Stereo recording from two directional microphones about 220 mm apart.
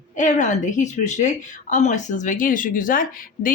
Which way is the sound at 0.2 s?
35° left (ahead or behind).